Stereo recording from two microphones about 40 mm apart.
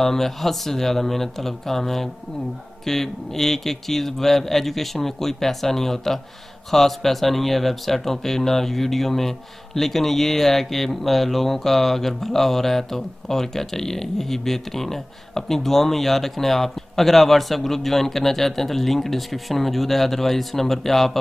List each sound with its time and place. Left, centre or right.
0.0 s a man's voice: centre